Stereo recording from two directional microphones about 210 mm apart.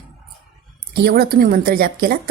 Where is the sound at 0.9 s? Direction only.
50° right (ahead or behind).